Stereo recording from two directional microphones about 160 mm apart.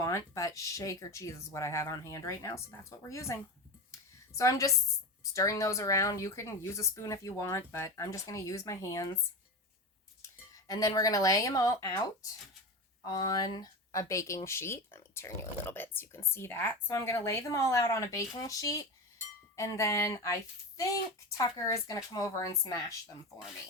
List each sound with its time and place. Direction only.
0.0 s speech: 20° left (ahead or behind)
3.9 s a sound: 20° left (ahead or behind)
5.3 s speech: 20° left (ahead or behind)
10.7 s speech: 25° left (ahead or behind)